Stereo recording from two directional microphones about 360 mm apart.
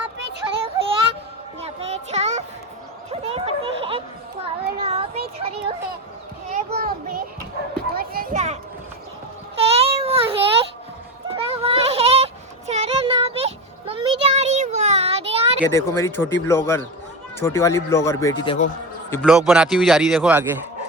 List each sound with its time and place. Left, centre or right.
0.5 s child singing: centre
3.1 s a sound: centre
7.9 s children playing: right
9.6 s a sound: centre
11.3 s child singing: centre
15.7 s speech: centre
18.4 s speech: centre
19.1 s speech: centre